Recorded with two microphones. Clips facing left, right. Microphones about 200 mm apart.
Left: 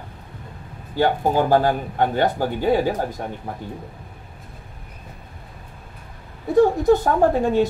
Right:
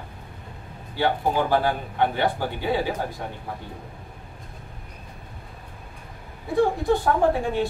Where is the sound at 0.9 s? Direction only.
45° left (ahead or behind).